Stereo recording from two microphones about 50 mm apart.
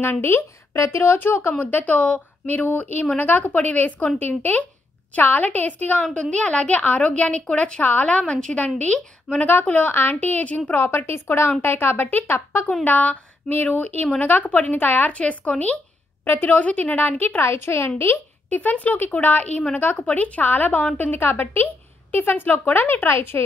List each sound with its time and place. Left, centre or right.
0.0 s speech: left
0.4 s speech: left
1.6 s a woman's voice: left; by 7.8 s centre
7.8 s a woman's voice: left
8.2 s a woman's voice: centre
9.5 s speech: left
10.3 s speech: left
11.1 s speech: left
12.3 s speech: left
12.8 s a woman's voice: left
16.9 s speech: left
17.4 s speech: left
18.5 s speech: left